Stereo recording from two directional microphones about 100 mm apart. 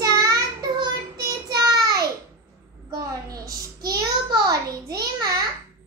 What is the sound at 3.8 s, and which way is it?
Child singing, 40° right (ahead or behind).